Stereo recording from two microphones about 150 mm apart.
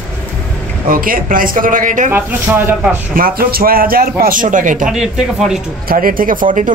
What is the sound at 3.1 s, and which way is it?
A man's voice, 80° right.